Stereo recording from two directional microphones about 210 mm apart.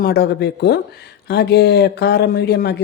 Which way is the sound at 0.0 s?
50° left (ahead or behind).